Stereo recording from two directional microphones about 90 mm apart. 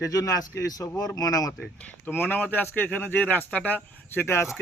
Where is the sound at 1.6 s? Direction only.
15° left (ahead or behind).